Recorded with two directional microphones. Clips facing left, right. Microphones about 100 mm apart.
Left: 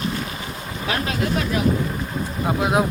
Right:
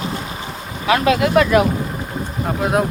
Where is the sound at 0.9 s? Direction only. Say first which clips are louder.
Right 8 dB; 90° right.